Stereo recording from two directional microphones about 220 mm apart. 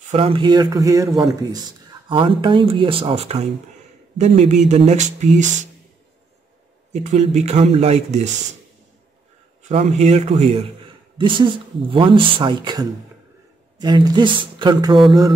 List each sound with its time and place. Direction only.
0.1 s speech: 25° right (ahead or behind)
6.9 s speech: 30° right (ahead or behind)
9.6 s speech: 30° right (ahead or behind)